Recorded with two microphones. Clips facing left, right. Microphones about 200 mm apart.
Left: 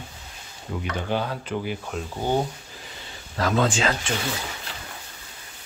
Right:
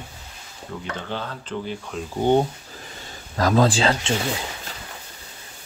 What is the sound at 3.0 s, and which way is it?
Speech, 40° right (ahead or behind).